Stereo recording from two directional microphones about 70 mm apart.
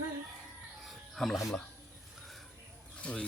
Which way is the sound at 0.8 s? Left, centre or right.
Centre.